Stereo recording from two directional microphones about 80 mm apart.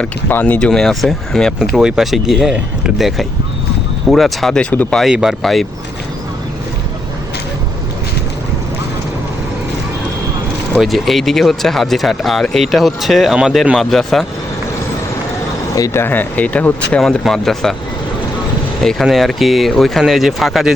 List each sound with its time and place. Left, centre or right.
0.0 s speech: left
0.7 s speech: centre
1.5 s speech: centre
4.7 s speech: left
5.1 s speech: centre
10.8 s speech: centre
15.9 s speech: left
17.0 s speech: centre
18.8 s speech: centre